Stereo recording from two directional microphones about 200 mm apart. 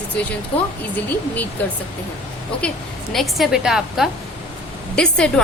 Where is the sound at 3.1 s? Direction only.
Centre (ahead or behind).